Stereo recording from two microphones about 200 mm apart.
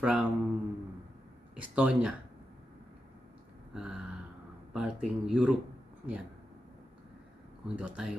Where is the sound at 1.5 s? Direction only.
5° right (ahead or behind).